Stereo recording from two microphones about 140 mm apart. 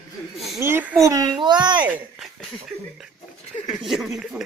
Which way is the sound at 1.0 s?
30° right (ahead or behind).